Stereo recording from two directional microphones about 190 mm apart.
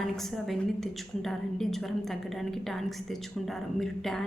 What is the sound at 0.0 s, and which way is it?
A woman's voice, centre (ahead or behind).